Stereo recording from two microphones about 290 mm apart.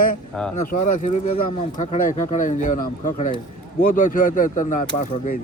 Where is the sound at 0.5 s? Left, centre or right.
Left.